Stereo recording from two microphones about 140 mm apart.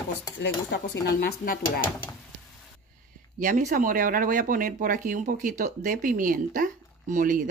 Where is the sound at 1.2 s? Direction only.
90° left.